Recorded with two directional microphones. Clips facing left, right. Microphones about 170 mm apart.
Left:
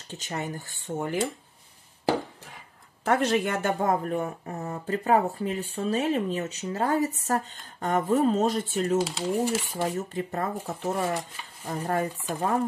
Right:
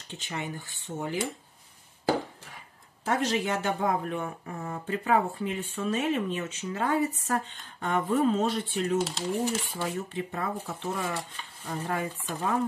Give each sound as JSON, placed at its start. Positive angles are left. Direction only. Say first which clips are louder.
{"t": 0.1, "sound": "speech", "louder": "left 3 dB", "side_deg": 40}
{"t": 3.1, "sound": "speech", "louder": "left 3 dB", "side_deg": 60}
{"t": 9.0, "sound": "speech", "louder": "left 3 dB", "side_deg": 10}
{"t": 9.8, "sound": "speech", "louder": "left 3 dB", "side_deg": 40}